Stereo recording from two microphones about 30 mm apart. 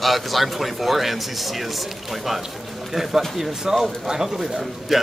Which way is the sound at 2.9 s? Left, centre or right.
Centre.